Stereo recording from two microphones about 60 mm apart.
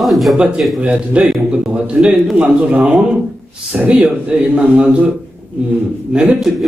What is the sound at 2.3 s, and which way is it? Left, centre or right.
A man's voice, right.